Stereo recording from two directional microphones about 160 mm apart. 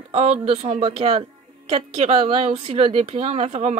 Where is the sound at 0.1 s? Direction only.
40° right (ahead or behind).